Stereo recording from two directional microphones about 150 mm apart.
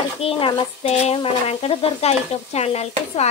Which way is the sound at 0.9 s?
45° left (ahead or behind).